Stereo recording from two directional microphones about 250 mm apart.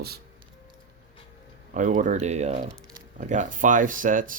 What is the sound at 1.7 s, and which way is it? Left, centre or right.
Speech, right.